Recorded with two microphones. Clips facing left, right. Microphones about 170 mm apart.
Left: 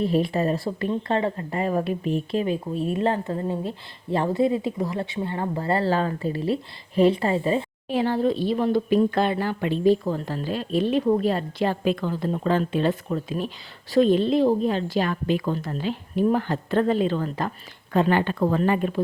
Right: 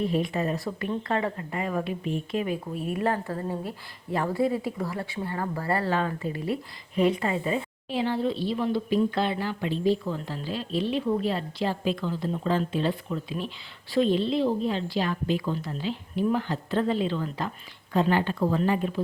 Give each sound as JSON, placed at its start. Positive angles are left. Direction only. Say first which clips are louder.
{"t": 0.0, "sound": "a woman's voice", "louder": "left 4 dB", "side_deg": 35}
{"t": 7.9, "sound": "speech", "louder": "left 4 dB", "side_deg": 45}